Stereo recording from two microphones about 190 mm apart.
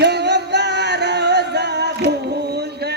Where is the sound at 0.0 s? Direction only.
60° right (ahead or behind).